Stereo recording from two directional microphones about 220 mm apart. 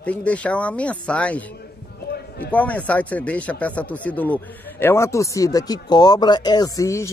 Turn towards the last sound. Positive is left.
turn(degrees=15)  # may be behind; listen again after turning